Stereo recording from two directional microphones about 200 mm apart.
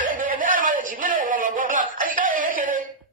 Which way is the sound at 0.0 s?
40° right (ahead or behind).